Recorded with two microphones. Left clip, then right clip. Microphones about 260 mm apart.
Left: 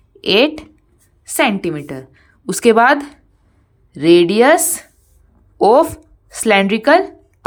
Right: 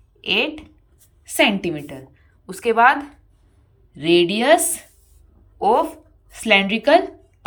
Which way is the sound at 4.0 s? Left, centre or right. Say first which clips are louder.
Left 7 dB; centre.